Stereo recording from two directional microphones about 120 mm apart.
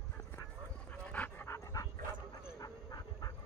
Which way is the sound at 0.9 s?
15° left (ahead or behind).